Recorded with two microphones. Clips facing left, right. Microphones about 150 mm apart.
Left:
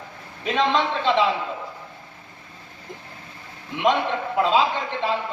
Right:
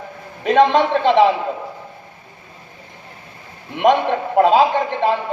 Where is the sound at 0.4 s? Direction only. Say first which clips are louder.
Right 8 dB; 55° right (ahead or behind).